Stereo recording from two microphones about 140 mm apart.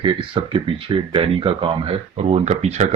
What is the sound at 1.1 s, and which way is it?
Speech, 40° right (ahead or behind).